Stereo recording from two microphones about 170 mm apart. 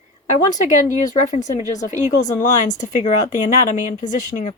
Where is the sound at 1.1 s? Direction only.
45° left (ahead or behind).